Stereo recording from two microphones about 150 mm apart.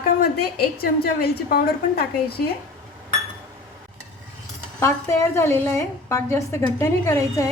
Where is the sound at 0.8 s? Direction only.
90° left.